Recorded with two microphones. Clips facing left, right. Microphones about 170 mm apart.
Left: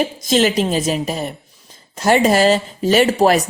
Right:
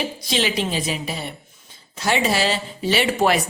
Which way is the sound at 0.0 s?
45° left (ahead or behind).